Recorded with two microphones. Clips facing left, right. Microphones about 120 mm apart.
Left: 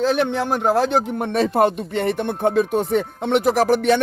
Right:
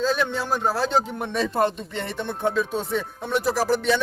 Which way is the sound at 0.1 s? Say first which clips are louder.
Left 4 dB; 65° left (ahead or behind).